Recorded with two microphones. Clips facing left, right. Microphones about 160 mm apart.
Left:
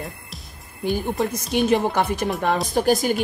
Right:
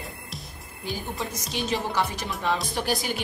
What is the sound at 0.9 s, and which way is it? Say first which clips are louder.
A woman's voice: left 9 dB; 55° left (ahead or behind).